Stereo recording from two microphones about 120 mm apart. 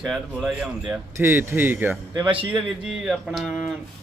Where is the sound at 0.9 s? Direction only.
20° right (ahead or behind).